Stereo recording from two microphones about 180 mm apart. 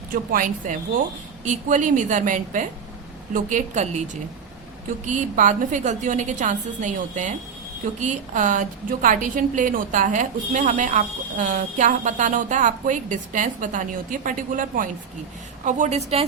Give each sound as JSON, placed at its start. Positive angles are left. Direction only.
{"t": 0.1, "sound": "a woman's voice", "side_deg": -50}